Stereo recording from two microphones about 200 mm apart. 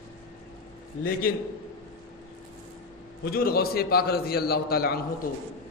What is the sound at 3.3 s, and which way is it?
A man's voice, 50° left (ahead or behind).